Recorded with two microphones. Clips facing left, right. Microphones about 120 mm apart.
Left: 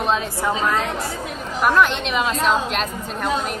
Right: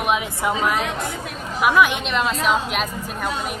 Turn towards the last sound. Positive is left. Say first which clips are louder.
# left 2 dB
turn(degrees=-5)  # may be behind; listen again after turning